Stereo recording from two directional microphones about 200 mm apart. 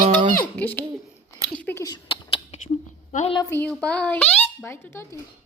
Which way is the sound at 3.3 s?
10° left (ahead or behind).